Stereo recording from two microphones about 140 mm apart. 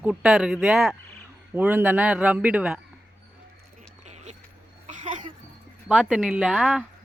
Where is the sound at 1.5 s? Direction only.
15° right (ahead or behind).